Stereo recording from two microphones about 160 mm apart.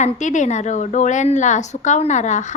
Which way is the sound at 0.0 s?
50° left (ahead or behind).